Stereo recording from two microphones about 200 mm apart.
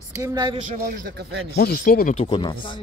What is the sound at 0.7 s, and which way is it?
Speech, 45° right (ahead or behind).